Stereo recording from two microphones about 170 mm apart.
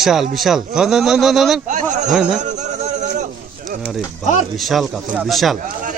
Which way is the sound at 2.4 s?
45° right (ahead or behind).